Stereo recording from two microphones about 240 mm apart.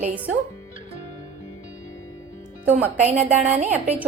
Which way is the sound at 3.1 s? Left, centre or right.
Right.